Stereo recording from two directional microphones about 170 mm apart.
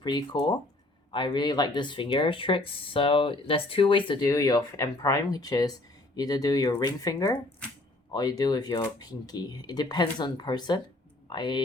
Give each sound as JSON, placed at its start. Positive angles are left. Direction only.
{"t": 0.0, "sound": "speech", "side_deg": 25}